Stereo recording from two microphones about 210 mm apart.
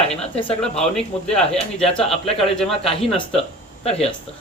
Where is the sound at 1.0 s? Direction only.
5° left (ahead or behind).